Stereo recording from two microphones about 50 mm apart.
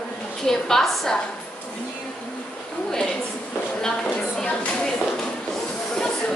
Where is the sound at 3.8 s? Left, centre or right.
Centre.